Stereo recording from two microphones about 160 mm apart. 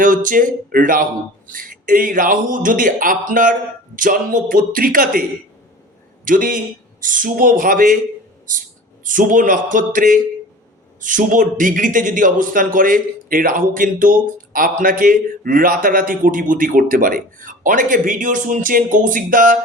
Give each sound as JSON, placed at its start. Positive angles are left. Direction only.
{"t": 0.0, "sound": "a man's voice", "side_deg": -55}
{"t": 6.2, "sound": "a man's voice", "side_deg": -60}
{"t": 9.0, "sound": "a man's voice", "side_deg": -55}